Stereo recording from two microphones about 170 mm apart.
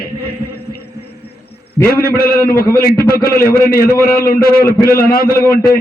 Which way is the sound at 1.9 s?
60° left (ahead or behind).